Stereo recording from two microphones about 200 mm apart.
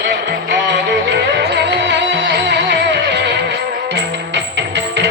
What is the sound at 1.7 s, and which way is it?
Music, 60° right (ahead or behind).